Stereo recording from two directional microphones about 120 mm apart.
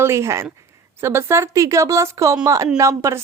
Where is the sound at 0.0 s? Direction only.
25° right (ahead or behind).